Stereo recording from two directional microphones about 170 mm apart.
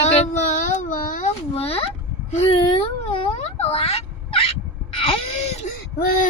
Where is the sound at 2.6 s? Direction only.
30° left (ahead or behind).